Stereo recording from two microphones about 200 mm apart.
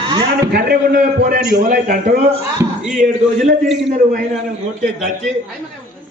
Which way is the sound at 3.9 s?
45° right (ahead or behind).